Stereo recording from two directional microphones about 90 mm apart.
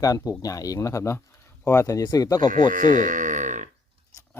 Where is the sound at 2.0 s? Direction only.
45° left (ahead or behind).